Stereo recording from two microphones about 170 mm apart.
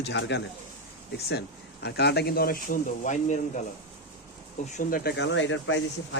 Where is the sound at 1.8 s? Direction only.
75° left (ahead or behind); by 3.6 s 45° left (ahead or behind).